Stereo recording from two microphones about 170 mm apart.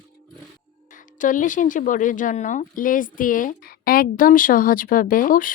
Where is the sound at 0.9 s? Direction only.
50° left (ahead or behind).